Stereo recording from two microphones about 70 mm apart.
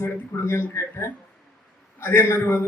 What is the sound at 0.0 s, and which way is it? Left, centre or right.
A man's voice, left.